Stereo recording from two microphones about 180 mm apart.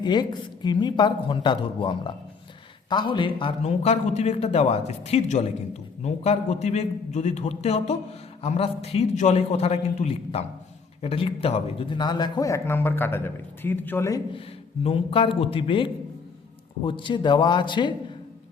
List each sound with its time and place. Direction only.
0.0 s a man's voice: 25° left (ahead or behind)
14.8 s speech: 30° left (ahead or behind)